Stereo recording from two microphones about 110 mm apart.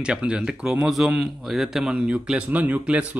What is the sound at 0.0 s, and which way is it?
A man's voice, 10° right (ahead or behind).